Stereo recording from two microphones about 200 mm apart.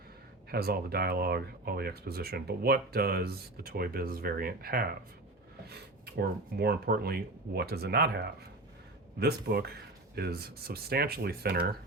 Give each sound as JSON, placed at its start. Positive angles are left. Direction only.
{"t": 0.5, "sound": "speech", "side_deg": -50}